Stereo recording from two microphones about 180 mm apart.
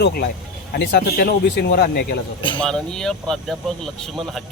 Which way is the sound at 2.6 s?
5° left (ahead or behind).